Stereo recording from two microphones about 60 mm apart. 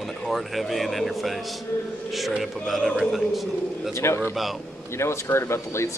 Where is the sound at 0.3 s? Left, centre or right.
Centre.